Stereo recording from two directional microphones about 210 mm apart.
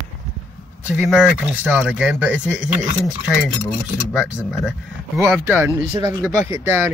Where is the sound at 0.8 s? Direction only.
10° right (ahead or behind).